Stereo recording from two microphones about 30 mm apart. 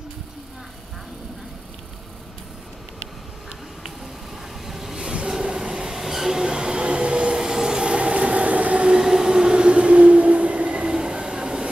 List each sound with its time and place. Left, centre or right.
4.6 s vehicle: centre
4.9 s train: right
5.9 s train: centre
6.4 s train: right
7.3 s vehicle: centre
7.8 s vehicle: right
9.0 s train: centre
9.7 s train: right